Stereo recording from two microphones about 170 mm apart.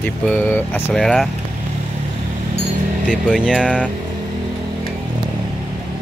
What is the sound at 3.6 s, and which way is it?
Speech, 5° left (ahead or behind).